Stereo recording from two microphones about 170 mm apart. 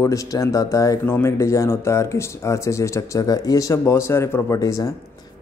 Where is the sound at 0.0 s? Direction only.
20° left (ahead or behind).